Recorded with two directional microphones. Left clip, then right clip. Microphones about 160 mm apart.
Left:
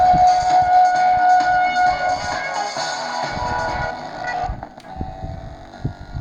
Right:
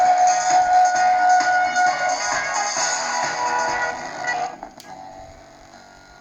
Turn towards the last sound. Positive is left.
turn(degrees=25)  # may be behind; listen again after turning